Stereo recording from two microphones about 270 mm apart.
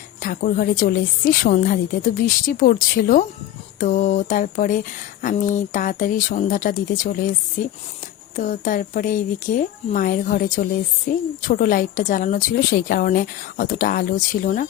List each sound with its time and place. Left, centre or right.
0.2 s a woman's voice: left